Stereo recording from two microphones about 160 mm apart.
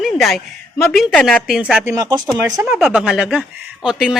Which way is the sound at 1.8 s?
20° right (ahead or behind).